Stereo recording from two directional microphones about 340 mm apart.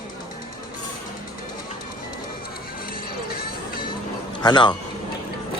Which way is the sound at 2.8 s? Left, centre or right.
Left.